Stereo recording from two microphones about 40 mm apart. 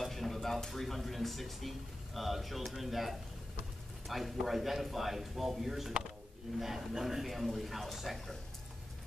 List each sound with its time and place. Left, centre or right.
0.0 s speech: centre